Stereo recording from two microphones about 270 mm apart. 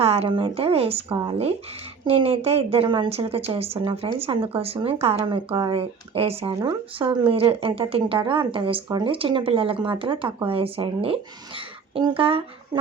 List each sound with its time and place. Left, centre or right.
0.0 s a woman's voice: right